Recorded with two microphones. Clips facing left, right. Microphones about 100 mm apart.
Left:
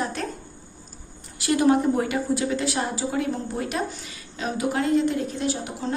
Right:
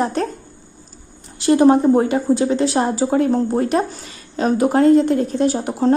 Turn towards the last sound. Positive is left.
turn(degrees=-45)  # may be behind; listen again after turning